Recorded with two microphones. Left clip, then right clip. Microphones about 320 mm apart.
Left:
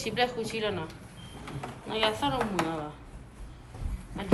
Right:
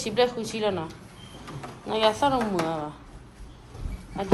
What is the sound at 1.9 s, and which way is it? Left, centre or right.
Speech, centre.